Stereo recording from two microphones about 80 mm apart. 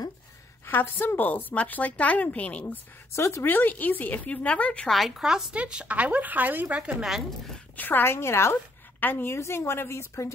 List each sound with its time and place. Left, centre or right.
0.7 s speech: left
3.2 s speech: left; by 4.8 s centre
4.8 s speech: centre; by 7.0 s right
7.0 s speech: centre
7.7 s a woman's voice: left